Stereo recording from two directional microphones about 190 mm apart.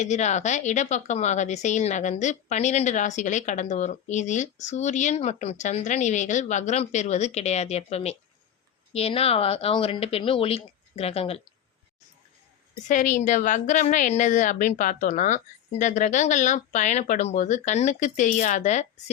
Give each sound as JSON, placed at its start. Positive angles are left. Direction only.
{"t": 0.0, "sound": "speech", "side_deg": 35}
{"t": 12.9, "sound": "speech", "side_deg": 40}